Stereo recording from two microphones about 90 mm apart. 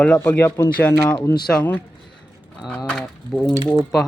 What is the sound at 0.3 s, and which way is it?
Speech, 25° left (ahead or behind).